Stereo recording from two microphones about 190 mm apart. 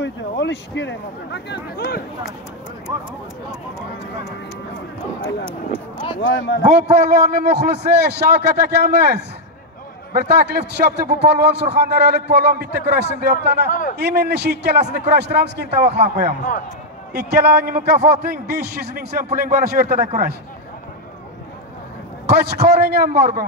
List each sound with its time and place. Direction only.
0.0 s speech: 65° left (ahead or behind)
2.9 s speech: 15° right (ahead or behind)
6.2 s speech: 65° left (ahead or behind)
6.6 s a man's voice: 35° right (ahead or behind)
7.5 s a man's voice: 60° right (ahead or behind)
13.7 s a man's voice: 45° left (ahead or behind)
13.9 s a man's voice: 60° right (ahead or behind)
22.3 s a man's voice: 60° right (ahead or behind)